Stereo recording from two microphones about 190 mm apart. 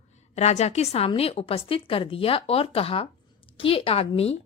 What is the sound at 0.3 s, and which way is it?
A woman's voice, 35° left (ahead or behind).